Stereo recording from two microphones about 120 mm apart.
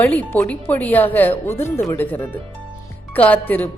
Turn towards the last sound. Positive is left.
turn(degrees=15)  # may be behind; listen again after turning